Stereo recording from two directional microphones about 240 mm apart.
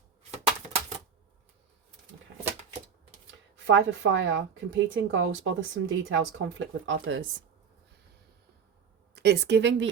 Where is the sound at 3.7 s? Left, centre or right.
Right.